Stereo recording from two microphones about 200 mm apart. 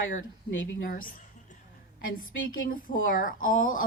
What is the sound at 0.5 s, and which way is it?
Speech, 75° left (ahead or behind).